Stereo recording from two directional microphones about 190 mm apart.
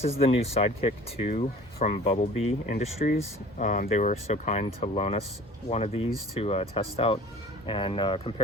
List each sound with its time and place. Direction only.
0.2 s speech: 30° left (ahead or behind)